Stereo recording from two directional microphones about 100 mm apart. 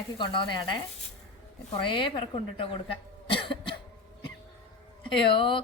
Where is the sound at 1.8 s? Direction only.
55° left (ahead or behind).